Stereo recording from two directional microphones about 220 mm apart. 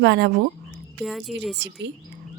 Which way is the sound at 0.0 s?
50° right (ahead or behind).